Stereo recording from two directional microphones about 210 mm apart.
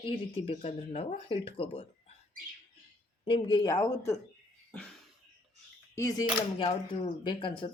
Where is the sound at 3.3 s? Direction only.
25° left (ahead or behind).